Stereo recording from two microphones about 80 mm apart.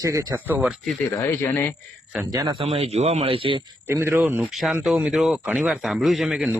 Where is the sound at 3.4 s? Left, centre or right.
Right.